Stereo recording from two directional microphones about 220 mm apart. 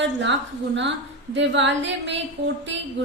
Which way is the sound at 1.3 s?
55° right (ahead or behind).